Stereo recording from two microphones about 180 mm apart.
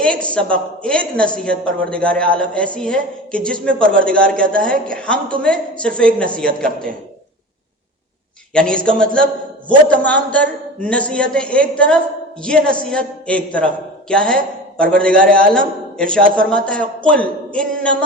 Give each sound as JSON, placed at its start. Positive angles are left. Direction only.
{"t": 0.0, "sound": "a woman's voice", "side_deg": 5}
{"t": 8.5, "sound": "a woman's voice", "side_deg": 5}
{"t": 15.1, "sound": "a man's voice", "side_deg": -50}
{"t": 15.4, "sound": "a woman's voice", "side_deg": 5}